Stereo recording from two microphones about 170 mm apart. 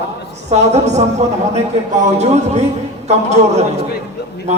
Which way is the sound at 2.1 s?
40° right (ahead or behind).